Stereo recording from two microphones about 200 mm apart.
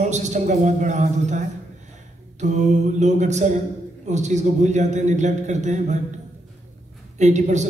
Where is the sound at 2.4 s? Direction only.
35° right (ahead or behind).